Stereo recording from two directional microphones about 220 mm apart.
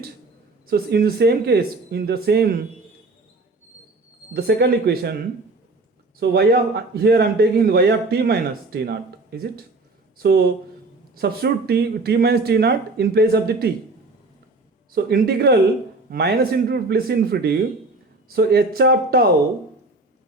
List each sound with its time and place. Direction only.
0.7 s a man's voice: 45° right (ahead or behind)
4.4 s a man's voice: 45° right (ahead or behind)
6.1 s a man's voice: 45° right (ahead or behind)
10.2 s a man's voice: 45° right (ahead or behind)
14.9 s a man's voice: 45° right (ahead or behind)